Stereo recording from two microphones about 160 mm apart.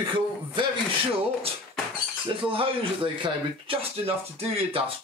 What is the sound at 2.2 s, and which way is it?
Speech, 35° right (ahead or behind).